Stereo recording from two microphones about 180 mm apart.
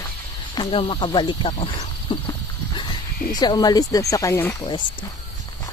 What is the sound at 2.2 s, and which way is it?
Horse, 25° left (ahead or behind).